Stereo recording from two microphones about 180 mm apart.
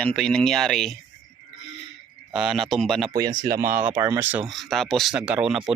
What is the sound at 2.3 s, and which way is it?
Speech, centre (ahead or behind).